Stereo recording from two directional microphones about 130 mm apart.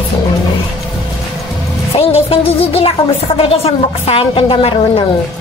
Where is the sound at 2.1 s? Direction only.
50° left (ahead or behind).